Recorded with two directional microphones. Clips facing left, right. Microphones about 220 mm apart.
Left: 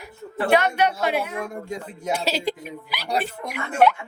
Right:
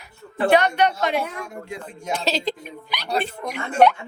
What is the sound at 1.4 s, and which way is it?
Speech, 50° left (ahead or behind).